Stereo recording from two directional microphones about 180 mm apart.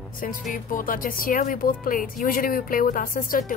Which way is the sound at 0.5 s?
50° left (ahead or behind).